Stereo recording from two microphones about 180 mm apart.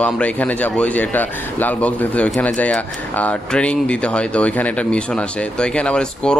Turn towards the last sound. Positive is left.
turn(degrees=5)  # may be behind; listen again after turning